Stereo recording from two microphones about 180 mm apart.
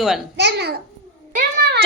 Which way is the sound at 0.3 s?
70° right (ahead or behind).